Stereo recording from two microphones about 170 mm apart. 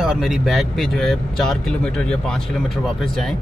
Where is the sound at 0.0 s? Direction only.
5° right (ahead or behind).